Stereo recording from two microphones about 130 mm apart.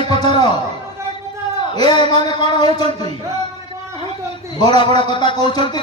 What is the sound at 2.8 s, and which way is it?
Speech, 50° right (ahead or behind).